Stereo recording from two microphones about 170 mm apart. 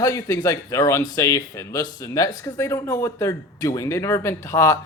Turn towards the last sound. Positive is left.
turn(degrees=20)  # may be behind; listen again after turning